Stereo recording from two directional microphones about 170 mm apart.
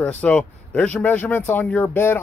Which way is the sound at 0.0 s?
5° left (ahead or behind).